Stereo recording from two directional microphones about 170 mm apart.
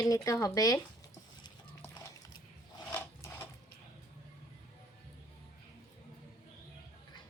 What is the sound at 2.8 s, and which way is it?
Filing, 10° left (ahead or behind).